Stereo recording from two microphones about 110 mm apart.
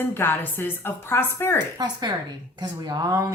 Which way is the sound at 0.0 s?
20° left (ahead or behind).